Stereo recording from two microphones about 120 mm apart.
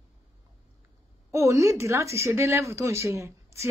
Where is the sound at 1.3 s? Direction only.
25° right (ahead or behind).